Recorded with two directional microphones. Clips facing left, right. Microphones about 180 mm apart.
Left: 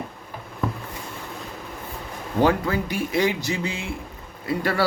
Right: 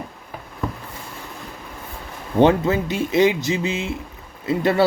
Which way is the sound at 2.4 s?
25° right (ahead or behind).